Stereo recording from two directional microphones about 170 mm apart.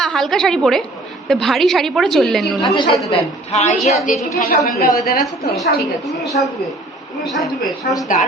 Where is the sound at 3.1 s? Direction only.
40° left (ahead or behind).